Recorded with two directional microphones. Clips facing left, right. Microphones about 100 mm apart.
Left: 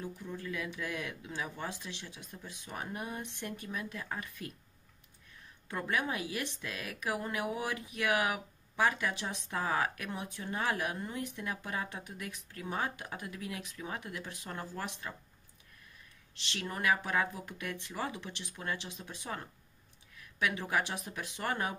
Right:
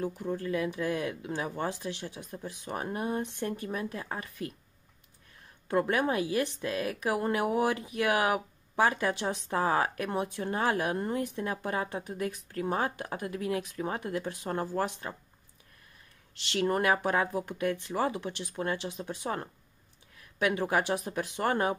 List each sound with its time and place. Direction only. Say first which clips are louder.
0.0 s speech: right 8 dB; 45° right (ahead or behind)
1.2 s speech: right 7 dB; 45° right (ahead or behind)
5.7 s speech: right 7 dB; 40° right (ahead or behind)
16.5 s speech: right 6 dB; 45° right (ahead or behind)